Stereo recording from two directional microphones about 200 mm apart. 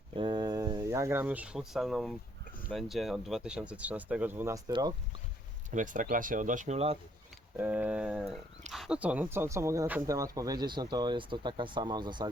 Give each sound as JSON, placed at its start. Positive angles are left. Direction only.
{"t": 0.1, "sound": "a sound", "side_deg": -25}
{"t": 2.6, "sound": "speech", "side_deg": 0}
{"t": 5.7, "sound": "speech", "side_deg": -40}
{"t": 7.5, "sound": "speech", "side_deg": -10}